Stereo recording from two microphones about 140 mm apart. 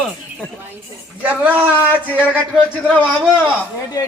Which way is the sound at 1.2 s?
10° right (ahead or behind).